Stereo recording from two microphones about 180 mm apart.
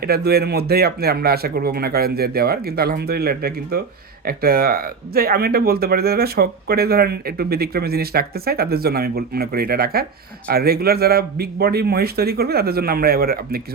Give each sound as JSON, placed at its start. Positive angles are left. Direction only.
{"t": 0.0, "sound": "speech", "side_deg": -60}